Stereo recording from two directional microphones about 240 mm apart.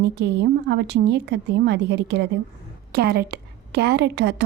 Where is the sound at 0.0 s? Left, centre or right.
Right.